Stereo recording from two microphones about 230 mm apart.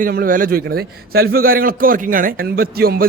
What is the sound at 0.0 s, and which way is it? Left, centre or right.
A man's voice, right.